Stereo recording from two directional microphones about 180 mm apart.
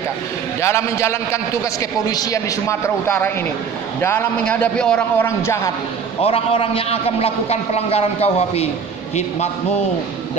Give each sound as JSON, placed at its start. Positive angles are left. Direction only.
{"t": 0.6, "sound": "a man's voice", "side_deg": 15}
{"t": 6.2, "sound": "a man's voice", "side_deg": 30}